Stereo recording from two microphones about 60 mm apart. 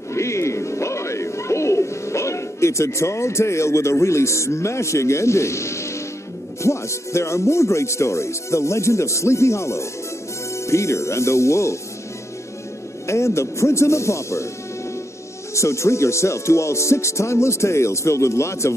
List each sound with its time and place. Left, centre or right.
0.1 s music: left
6.6 s speech: left
13.0 s speech: left
15.5 s speech: left